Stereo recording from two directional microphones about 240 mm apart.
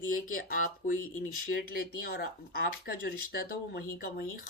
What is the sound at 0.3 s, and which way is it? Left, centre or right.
Speech, left.